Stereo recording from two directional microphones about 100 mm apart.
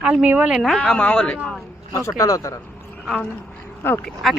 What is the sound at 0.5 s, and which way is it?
Speech, 5° left (ahead or behind).